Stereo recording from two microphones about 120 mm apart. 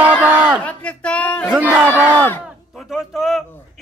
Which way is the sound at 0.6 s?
10° left (ahead or behind).